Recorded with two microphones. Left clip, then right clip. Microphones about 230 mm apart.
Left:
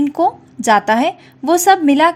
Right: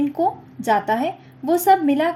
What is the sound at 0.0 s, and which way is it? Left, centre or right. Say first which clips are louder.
A woman's voice: left 5 dB; left.